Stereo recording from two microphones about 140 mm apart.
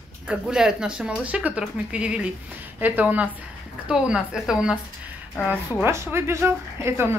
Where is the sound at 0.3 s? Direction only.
5° right (ahead or behind).